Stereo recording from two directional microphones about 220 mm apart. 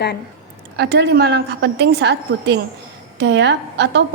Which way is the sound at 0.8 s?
50° right (ahead or behind).